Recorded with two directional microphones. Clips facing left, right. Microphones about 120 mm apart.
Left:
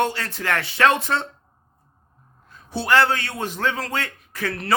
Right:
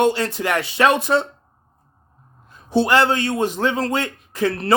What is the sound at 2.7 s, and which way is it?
A man's voice, 20° right (ahead or behind).